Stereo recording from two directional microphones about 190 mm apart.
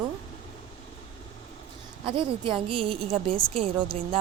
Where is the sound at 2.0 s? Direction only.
25° right (ahead or behind).